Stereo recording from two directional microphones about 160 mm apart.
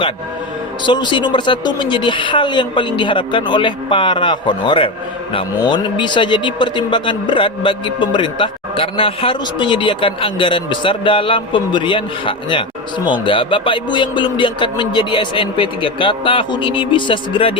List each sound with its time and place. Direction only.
0.9 s a woman's voice: 30° left (ahead or behind)